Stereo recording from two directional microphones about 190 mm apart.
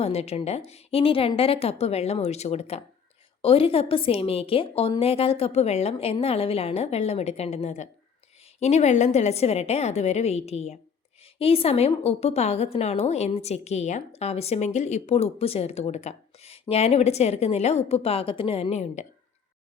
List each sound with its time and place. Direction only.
0.0 s a woman's voice: 35° left (ahead or behind)